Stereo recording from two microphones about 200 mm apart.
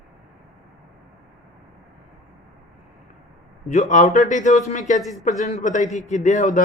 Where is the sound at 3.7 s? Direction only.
35° left (ahead or behind).